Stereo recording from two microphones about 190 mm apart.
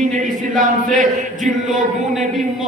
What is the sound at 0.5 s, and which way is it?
A man's voice, 40° right (ahead or behind).